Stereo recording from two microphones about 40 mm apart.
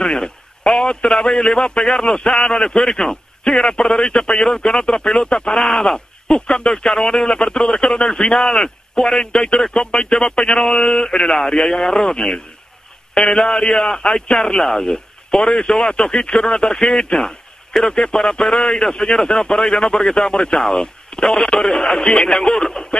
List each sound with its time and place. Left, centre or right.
0.0 s a man's voice: centre
5.9 s speech: left
22.7 s speech: centre